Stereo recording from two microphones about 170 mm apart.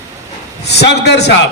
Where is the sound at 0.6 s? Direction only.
80° left.